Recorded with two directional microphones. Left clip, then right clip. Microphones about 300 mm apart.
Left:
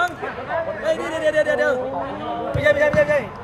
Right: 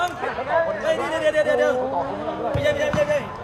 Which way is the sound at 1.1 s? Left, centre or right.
Centre.